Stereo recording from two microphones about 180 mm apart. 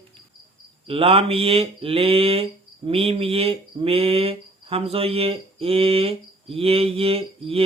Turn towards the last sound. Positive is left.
turn(degrees=-30)  # may be behind; listen again after turning